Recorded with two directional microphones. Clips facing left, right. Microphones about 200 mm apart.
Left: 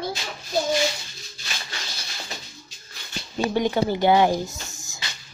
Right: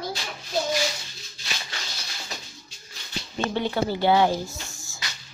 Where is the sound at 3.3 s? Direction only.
15° left (ahead or behind).